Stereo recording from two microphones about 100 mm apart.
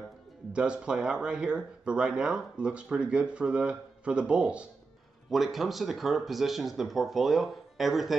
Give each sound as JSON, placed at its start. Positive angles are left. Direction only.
{"t": 0.5, "sound": "speech", "side_deg": -10}